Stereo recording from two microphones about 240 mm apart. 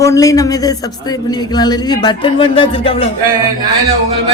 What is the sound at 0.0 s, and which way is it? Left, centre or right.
A man's voice, centre.